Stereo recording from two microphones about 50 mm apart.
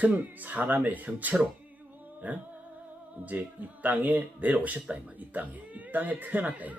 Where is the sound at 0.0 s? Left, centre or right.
Right.